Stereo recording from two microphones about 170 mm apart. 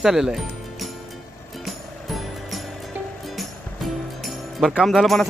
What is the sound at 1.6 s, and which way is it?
Music, centre (ahead or behind).